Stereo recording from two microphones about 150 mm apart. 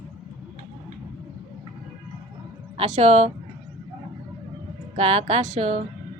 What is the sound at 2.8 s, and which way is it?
Speech, 50° right (ahead or behind).